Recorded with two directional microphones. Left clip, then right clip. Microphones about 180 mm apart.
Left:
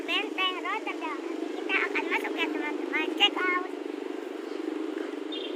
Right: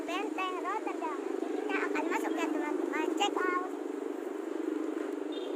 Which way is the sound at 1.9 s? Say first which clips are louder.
Left 3 dB; 20° right (ahead or behind).